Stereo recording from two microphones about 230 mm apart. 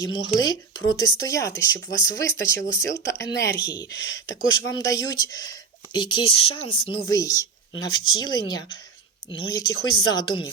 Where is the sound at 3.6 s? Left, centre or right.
Centre.